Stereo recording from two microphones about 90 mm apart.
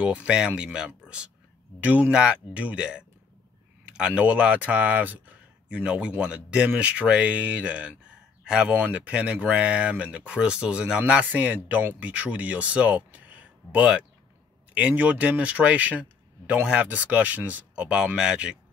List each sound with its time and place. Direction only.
0.0 s speech: 15° right (ahead or behind)
8.1 s a sound: 10° right (ahead or behind)
8.7 s speech: 15° right (ahead or behind)